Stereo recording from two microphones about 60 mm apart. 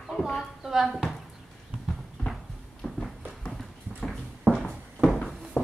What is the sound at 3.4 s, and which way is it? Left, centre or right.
Clip-clop, centre.